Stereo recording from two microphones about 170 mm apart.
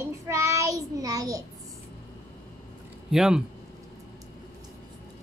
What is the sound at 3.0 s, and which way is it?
Speech, 5° right (ahead or behind).